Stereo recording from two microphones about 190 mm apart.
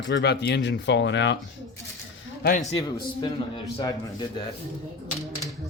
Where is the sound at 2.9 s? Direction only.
25° left (ahead or behind).